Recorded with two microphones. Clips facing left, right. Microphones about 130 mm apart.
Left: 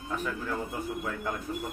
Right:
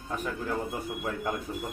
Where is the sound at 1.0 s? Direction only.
20° right (ahead or behind).